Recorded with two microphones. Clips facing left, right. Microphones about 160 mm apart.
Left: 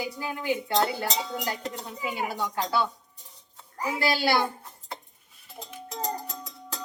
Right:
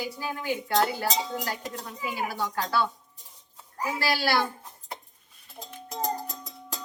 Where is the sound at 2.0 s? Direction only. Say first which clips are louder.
Even; 20° left (ahead or behind).